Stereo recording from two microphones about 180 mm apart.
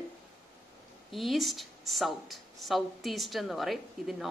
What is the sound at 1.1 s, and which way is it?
Speech, centre (ahead or behind).